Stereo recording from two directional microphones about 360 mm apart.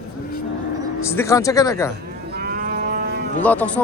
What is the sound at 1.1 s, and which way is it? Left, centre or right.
Speech, centre.